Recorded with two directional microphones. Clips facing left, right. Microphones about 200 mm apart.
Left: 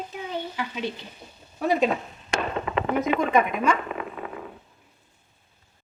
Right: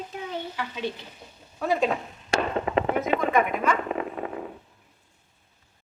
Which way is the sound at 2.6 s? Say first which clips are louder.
Even; 30° right (ahead or behind).